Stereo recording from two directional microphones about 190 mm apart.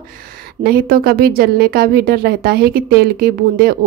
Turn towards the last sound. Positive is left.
turn(degrees=-50)  # may be behind; listen again after turning